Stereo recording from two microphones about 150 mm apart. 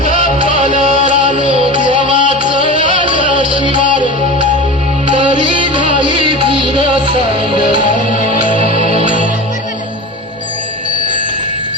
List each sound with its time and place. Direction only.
0.0 s music: 60° left (ahead or behind)
5.1 s music: 35° right (ahead or behind)
7.8 s music: 60° left (ahead or behind)
8.7 s music: 40° right (ahead or behind)